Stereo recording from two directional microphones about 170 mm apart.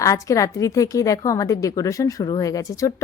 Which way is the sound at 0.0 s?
20° left (ahead or behind).